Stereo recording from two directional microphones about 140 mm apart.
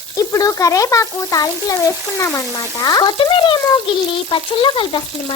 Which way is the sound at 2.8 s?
30° left (ahead or behind).